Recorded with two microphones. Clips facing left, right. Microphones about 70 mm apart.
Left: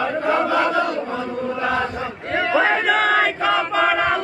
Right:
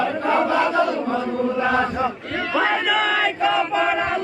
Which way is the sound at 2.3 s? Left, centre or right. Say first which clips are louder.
Left 5 dB; left.